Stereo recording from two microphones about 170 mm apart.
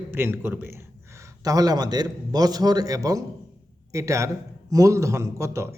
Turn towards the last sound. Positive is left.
turn(degrees=-15)  # may be behind; listen again after turning